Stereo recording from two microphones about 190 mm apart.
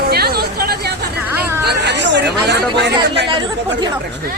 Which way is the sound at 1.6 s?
65° right (ahead or behind).